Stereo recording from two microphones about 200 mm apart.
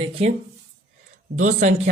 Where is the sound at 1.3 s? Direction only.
35° right (ahead or behind).